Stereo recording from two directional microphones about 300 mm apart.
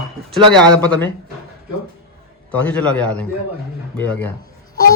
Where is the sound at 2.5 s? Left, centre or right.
Centre.